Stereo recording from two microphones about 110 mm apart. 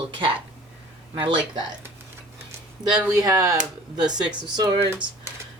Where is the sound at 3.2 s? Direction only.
35° right (ahead or behind).